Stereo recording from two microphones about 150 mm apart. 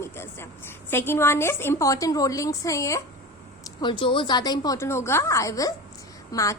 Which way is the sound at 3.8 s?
35° left (ahead or behind).